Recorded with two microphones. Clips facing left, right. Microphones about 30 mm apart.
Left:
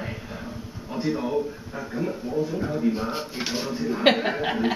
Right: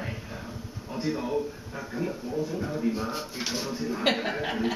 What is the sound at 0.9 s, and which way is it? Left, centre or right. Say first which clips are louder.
A man's voice: left 3 dB; centre.